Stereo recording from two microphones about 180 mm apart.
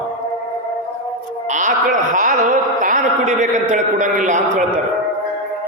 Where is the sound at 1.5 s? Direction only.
45° right (ahead or behind).